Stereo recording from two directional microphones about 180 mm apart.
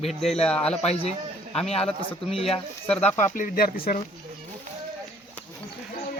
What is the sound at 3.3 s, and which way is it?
Speech, 50° left (ahead or behind).